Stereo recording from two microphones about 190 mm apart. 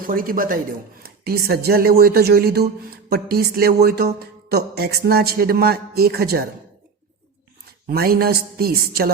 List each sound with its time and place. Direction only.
0.1 s speech: 50° right (ahead or behind)
7.9 s speech: 50° right (ahead or behind)